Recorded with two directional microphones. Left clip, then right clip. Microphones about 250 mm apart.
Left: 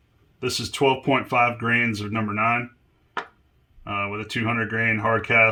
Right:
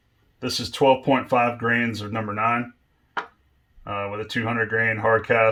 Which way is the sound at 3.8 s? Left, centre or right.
Centre.